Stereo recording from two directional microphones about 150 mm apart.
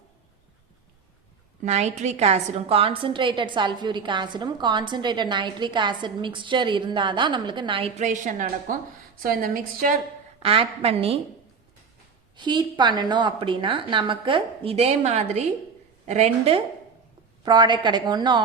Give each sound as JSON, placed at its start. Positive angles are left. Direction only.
{"t": 1.6, "sound": "a woman's voice", "side_deg": -45}
{"t": 9.2, "sound": "a woman's voice", "side_deg": -70}
{"t": 10.4, "sound": "a woman's voice", "side_deg": -40}
{"t": 12.4, "sound": "a woman's voice", "side_deg": -30}
{"t": 17.4, "sound": "a woman's voice", "side_deg": -30}